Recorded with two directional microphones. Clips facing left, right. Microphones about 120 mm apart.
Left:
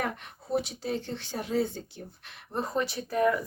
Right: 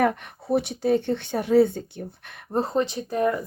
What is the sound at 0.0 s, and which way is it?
Speech, 60° right (ahead or behind).